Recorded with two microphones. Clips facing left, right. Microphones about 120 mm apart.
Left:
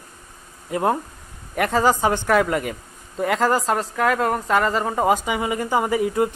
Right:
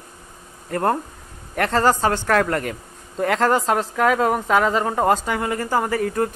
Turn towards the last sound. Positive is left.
turn(degrees=10)  # may be behind; listen again after turning